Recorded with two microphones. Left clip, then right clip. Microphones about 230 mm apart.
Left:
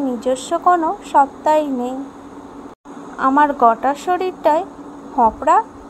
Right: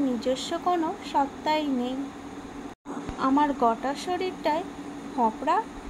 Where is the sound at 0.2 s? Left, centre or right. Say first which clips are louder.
Left 10 dB; centre.